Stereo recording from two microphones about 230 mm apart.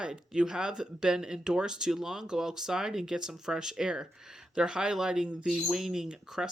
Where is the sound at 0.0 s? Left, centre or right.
Centre.